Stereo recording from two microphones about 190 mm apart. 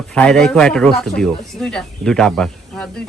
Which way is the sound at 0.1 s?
5° left (ahead or behind).